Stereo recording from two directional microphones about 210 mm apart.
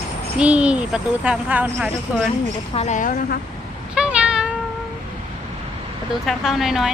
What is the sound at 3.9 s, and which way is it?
Meow, 5° right (ahead or behind).